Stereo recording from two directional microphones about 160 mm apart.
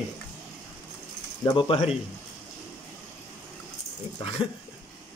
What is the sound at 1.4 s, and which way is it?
Speech, 30° left (ahead or behind).